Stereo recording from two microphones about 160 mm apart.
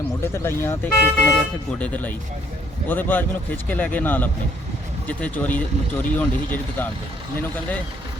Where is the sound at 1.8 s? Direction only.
10° left (ahead or behind).